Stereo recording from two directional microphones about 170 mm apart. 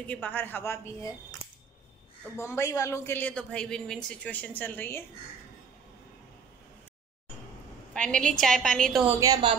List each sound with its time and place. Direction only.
0.0 s a woman's voice: 10° left (ahead or behind)
2.3 s a woman's voice: 15° left (ahead or behind)
7.9 s a woman's voice: 5° left (ahead or behind)
9.0 s a woman's voice: 15° right (ahead or behind)